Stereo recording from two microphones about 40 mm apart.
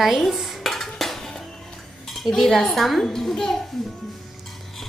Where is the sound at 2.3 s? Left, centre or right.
Centre.